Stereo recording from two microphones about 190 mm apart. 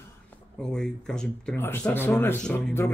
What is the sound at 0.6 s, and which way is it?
A man's voice, 5° left (ahead or behind).